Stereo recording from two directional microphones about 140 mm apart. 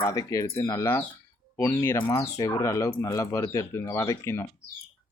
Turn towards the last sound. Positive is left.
turn(degrees=20)  # may be behind; listen again after turning